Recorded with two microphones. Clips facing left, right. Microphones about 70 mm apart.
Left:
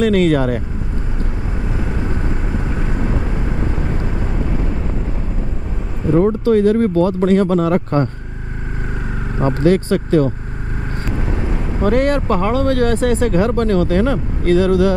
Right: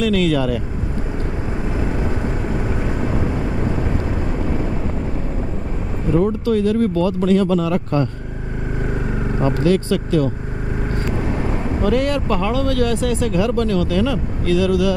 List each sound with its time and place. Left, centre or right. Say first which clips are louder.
0.0 s speech: left 3 dB; left
2.9 s vehicle: left 1 dB; centre
6.1 s speech: left 4 dB; left
9.4 s speech: left 3 dB; left
11.8 s speech: left 4 dB; left